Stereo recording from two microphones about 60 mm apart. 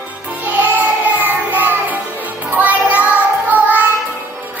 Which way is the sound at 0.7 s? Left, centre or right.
Right.